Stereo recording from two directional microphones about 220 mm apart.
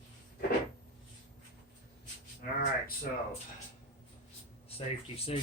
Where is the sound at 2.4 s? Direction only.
45° left (ahead or behind).